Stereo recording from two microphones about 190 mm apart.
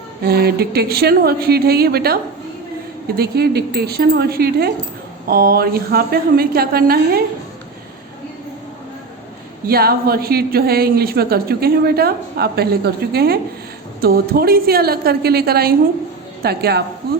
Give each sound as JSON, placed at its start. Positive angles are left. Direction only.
{"t": 0.3, "sound": "a woman's voice", "side_deg": -55}
{"t": 3.2, "sound": "a woman's voice", "side_deg": -55}
{"t": 9.6, "sound": "a woman's voice", "side_deg": -55}